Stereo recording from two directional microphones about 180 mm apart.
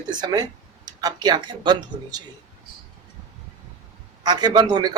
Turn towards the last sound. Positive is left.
turn(degrees=-25)  # may be behind; listen again after turning